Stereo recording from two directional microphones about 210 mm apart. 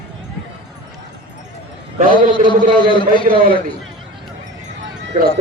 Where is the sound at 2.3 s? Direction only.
20° left (ahead or behind).